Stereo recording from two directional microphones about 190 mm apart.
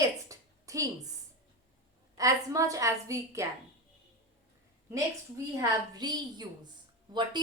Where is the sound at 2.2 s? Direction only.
15° right (ahead or behind).